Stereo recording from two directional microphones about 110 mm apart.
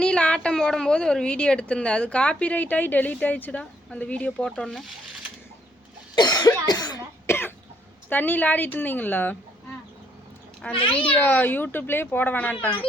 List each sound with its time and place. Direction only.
0.0 s a woman's voice: 10° left (ahead or behind)
6.1 s cough: 40° left (ahead or behind)
7.3 s cough: 20° left (ahead or behind)
8.1 s a woman's voice: 15° left (ahead or behind)
10.8 s a child's voice: 55° left (ahead or behind)
11.0 s a woman's voice: 15° left (ahead or behind)